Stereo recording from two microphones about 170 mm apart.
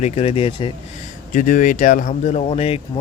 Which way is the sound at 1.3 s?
50° left (ahead or behind).